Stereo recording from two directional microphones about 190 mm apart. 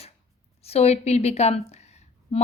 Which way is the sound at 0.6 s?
35° left (ahead or behind).